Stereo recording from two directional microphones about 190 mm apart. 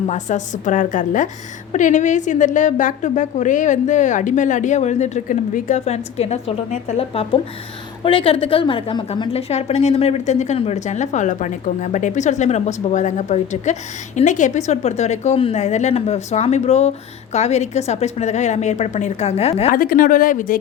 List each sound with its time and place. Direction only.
0.1 s a woman's voice: 40° left (ahead or behind)
19.7 s speech: 50° left (ahead or behind)